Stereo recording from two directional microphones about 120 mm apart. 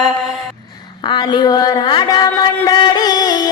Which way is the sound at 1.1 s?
35° left (ahead or behind).